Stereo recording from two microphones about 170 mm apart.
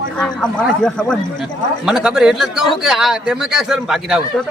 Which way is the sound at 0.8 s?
5° left (ahead or behind).